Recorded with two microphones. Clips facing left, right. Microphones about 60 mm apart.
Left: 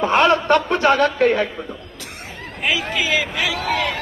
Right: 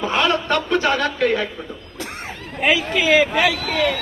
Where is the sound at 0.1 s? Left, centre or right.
Left.